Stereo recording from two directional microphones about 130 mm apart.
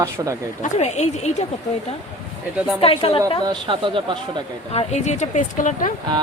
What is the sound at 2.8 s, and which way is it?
Speech, 50° left (ahead or behind).